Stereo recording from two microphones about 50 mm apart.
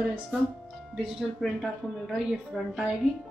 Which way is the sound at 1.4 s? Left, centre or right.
Centre.